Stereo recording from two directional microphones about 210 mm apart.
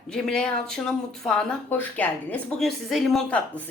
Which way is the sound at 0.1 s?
5° left (ahead or behind).